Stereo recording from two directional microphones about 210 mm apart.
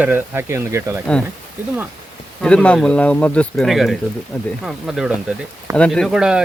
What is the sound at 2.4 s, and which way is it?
Speech, 5° left (ahead or behind).